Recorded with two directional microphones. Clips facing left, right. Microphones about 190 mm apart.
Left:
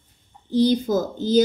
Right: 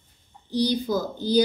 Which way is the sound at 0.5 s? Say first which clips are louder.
Left 5 dB; 45° left (ahead or behind).